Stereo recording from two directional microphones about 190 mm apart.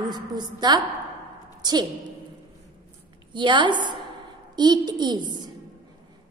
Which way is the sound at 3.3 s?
25° right (ahead or behind).